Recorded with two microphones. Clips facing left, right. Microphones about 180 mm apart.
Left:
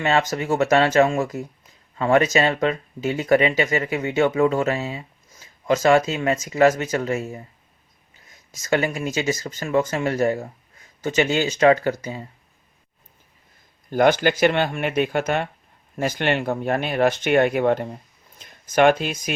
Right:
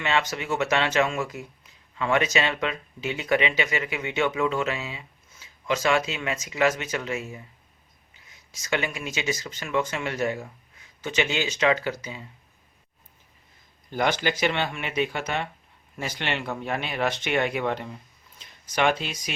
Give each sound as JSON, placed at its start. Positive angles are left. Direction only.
{"t": 0.0, "sound": "speech", "side_deg": 40}
{"t": 8.6, "sound": "speech", "side_deg": 40}
{"t": 13.9, "sound": "speech", "side_deg": 50}